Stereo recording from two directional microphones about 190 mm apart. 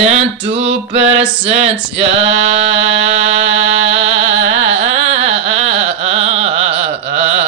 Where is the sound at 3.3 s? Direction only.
70° right (ahead or behind).